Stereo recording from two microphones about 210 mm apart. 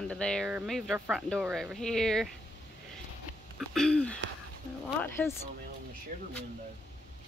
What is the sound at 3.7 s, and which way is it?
Speech, centre (ahead or behind).